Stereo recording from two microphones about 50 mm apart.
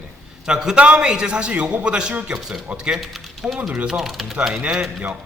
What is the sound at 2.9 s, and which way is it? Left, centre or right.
A man's voice, centre.